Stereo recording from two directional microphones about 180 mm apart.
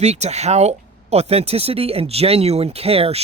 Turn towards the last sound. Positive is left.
turn(degrees=-35)  # may be behind; listen again after turning